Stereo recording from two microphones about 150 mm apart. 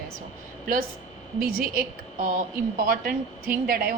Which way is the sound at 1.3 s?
70° right (ahead or behind).